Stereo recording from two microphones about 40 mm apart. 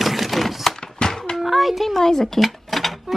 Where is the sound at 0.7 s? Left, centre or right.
Centre.